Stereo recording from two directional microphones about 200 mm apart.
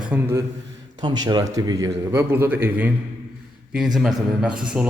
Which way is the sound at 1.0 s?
20° right (ahead or behind).